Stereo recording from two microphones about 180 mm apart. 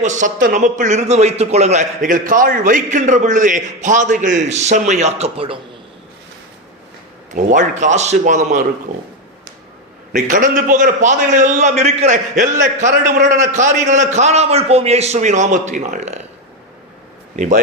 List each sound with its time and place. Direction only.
0.0 s a man's voice: 45° right (ahead or behind)
7.5 s speech: 40° right (ahead or behind)
10.1 s a man's voice: 45° right (ahead or behind)
17.3 s a man's voice: 45° right (ahead or behind)